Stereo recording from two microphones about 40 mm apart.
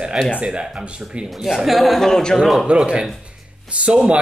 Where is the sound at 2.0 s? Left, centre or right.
Centre.